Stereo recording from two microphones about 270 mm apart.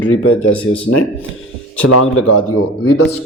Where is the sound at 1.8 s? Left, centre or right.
Left.